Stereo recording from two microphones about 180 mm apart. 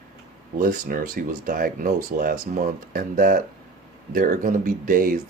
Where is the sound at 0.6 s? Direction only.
50° right (ahead or behind).